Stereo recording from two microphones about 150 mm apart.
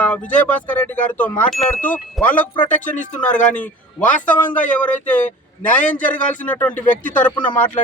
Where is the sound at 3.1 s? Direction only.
10° left (ahead or behind).